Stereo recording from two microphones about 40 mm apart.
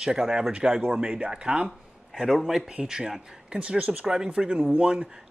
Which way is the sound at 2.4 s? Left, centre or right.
Centre.